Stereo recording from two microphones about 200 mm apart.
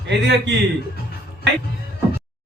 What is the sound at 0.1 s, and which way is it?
Speech, 60° right (ahead or behind).